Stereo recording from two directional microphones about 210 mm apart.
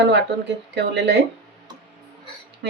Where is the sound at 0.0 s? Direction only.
55° right (ahead or behind).